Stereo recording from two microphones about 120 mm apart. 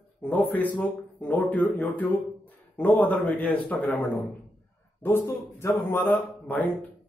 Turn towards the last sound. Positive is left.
turn(degrees=15)  # may be behind; listen again after turning